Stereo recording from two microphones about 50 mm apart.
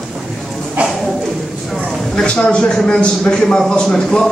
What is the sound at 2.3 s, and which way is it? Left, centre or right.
Speech, centre.